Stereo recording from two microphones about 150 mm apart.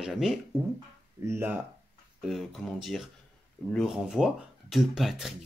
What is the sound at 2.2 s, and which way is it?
Speech, centre (ahead or behind).